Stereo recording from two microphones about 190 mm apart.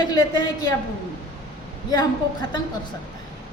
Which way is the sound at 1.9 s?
20° left (ahead or behind).